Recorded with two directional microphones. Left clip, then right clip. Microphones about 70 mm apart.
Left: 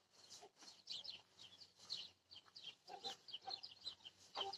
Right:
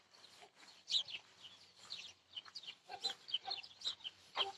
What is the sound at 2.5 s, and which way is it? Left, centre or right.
Chicken, centre.